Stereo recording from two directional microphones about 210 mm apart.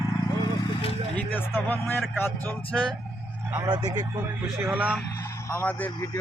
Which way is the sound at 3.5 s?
20° right (ahead or behind).